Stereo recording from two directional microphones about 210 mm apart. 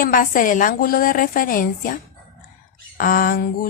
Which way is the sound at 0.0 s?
40° left (ahead or behind).